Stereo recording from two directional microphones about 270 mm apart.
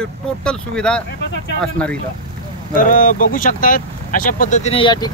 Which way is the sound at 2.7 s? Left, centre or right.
Left.